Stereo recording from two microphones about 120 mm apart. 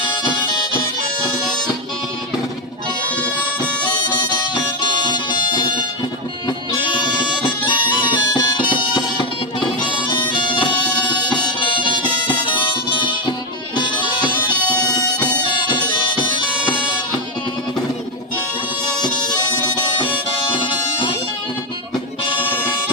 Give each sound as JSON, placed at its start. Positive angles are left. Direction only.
{"t": 0.1, "sound": "music", "side_deg": 35}
{"t": 3.2, "sound": "music", "side_deg": 10}
{"t": 4.5, "sound": "music", "side_deg": 40}
{"t": 6.8, "sound": "music", "side_deg": 40}
{"t": 18.9, "sound": "bagpipes", "side_deg": 35}
{"t": 20.0, "sound": "harmonica", "side_deg": 45}
{"t": 22.2, "sound": "music", "side_deg": 45}